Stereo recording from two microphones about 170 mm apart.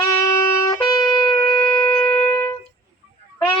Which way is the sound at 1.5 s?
15° left (ahead or behind).